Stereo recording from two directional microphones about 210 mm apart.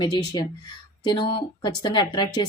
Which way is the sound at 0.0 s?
20° left (ahead or behind).